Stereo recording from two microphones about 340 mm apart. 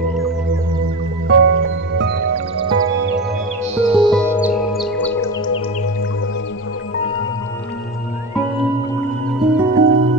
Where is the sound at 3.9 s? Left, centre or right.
Centre.